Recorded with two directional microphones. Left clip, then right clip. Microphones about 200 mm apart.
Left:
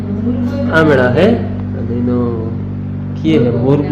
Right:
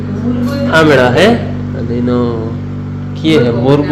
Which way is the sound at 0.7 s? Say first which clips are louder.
Right 3 dB; 10° right (ahead or behind).